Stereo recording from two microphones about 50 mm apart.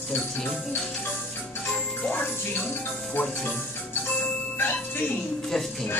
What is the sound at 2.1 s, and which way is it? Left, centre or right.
Music, left.